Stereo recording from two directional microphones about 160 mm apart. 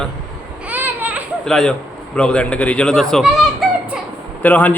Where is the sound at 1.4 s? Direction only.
5° left (ahead or behind).